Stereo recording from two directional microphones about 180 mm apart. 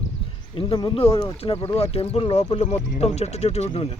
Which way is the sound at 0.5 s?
30° left (ahead or behind).